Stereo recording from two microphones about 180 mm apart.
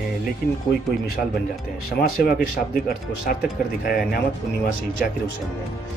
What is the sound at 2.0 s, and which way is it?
Speech, 55° left (ahead or behind).